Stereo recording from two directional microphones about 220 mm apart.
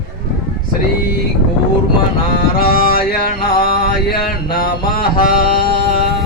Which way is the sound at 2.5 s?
45° left (ahead or behind).